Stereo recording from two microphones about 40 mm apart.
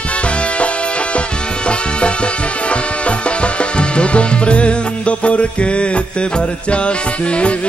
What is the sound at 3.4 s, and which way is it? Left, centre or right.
Music, left.